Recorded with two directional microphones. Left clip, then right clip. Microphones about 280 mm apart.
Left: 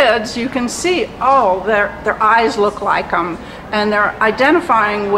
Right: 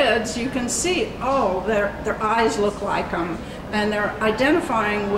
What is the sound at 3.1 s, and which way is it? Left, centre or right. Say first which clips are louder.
A woman's voice: left 8 dB; centre.